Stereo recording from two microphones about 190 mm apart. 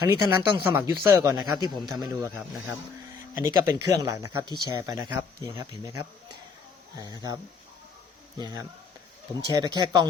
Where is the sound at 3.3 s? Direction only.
15° right (ahead or behind).